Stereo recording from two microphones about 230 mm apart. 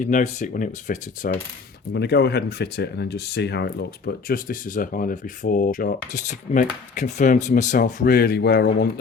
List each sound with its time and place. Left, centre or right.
0.0 s speech: left
1.9 s speech: left